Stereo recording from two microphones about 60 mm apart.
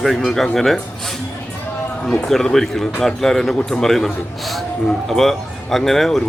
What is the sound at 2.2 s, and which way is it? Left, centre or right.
Speech, centre.